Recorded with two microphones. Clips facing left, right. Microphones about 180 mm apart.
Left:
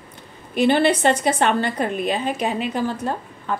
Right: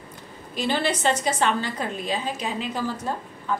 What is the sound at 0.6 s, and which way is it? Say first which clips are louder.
A woman's voice: left 8 dB; 60° left (ahead or behind).